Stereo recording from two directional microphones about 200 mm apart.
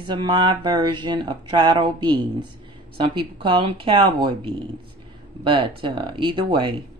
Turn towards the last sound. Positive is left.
turn(degrees=-25)  # may be behind; listen again after turning